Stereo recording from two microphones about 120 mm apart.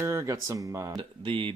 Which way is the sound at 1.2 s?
45° right (ahead or behind).